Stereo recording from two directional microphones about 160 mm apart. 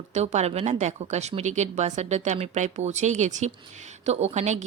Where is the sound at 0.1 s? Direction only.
45° right (ahead or behind).